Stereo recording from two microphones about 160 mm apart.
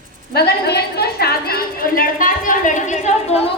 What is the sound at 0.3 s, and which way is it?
A woman's voice, 85° left.